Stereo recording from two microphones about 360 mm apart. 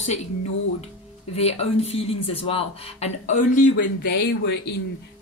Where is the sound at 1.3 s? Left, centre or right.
Centre.